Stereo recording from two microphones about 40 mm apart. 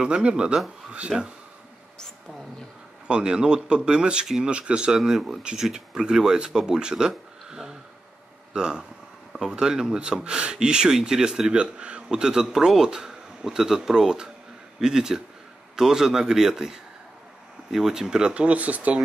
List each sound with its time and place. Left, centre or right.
0.0 s speech: right
1.1 s speech: centre
3.1 s speech: right
4.9 s speech: centre
5.6 s speech: centre
11.6 s speech: right
18.3 s speech: right